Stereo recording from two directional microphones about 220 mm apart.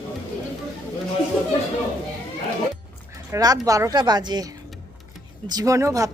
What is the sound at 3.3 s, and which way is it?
A woman's voice, 15° right (ahead or behind).